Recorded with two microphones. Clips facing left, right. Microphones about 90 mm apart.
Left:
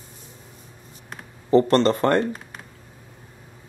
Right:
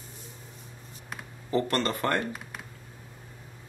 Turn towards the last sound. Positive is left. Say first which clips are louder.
# left 9 dB
turn(degrees=30)  # may be behind; listen again after turning